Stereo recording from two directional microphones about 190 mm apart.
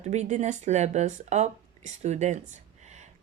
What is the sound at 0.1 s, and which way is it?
Speech, 40° right (ahead or behind).